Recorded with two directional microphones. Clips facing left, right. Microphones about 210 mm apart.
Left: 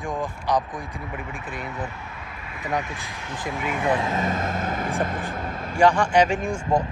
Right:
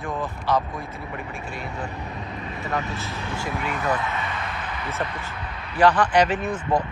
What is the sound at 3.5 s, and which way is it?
Speech, centre (ahead or behind).